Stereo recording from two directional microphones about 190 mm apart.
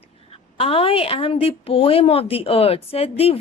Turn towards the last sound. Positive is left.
turn(degrees=30)  # may be behind; listen again after turning